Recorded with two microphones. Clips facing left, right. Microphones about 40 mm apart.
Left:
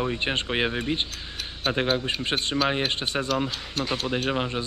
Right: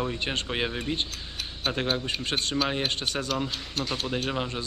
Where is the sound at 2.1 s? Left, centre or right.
Centre.